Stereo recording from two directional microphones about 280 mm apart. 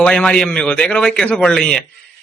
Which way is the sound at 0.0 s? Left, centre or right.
Centre.